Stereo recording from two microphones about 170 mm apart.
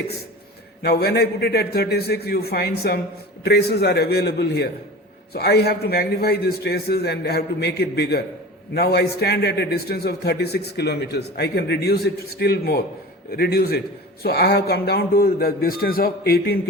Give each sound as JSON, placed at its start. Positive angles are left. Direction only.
{"t": 0.8, "sound": "a man's voice", "side_deg": 70}